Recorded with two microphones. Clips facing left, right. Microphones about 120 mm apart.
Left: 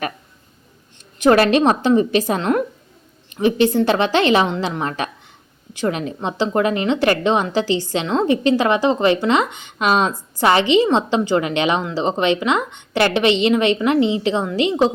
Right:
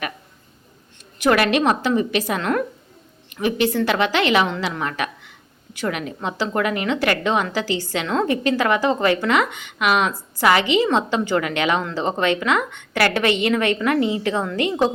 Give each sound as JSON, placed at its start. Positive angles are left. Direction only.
{"t": 1.3, "sound": "a woman's voice", "side_deg": 30}